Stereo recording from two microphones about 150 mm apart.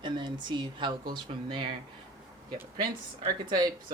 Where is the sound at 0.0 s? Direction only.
30° right (ahead or behind).